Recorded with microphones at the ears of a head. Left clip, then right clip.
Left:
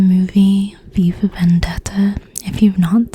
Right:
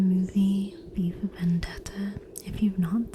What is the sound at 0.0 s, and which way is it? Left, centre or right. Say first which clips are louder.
Speech: left 12 dB; left.